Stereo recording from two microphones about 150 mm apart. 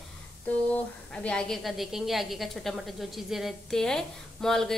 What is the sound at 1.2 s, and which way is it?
A woman's voice, 5° left (ahead or behind).